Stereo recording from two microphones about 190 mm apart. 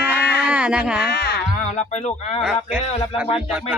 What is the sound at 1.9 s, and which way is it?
Speech, 35° left (ahead or behind).